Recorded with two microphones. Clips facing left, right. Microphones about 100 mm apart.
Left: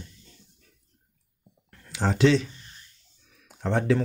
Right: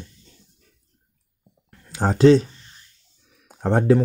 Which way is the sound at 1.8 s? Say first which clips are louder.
Right 7 dB; 40° right (ahead or behind).